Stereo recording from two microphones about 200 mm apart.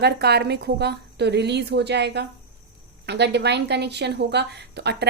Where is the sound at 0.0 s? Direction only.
55° right (ahead or behind).